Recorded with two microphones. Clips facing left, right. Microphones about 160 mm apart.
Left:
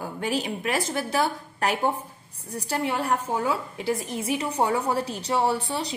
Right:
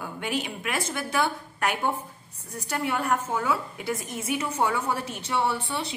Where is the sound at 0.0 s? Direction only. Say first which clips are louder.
Left 3 dB; 35° left (ahead or behind).